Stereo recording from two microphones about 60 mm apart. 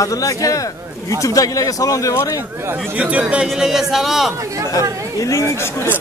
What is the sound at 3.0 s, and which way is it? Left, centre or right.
Speech, right.